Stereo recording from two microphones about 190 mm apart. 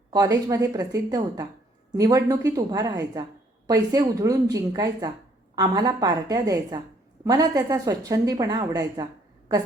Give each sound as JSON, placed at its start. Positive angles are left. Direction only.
{"t": 0.1, "sound": "a woman's voice", "side_deg": -20}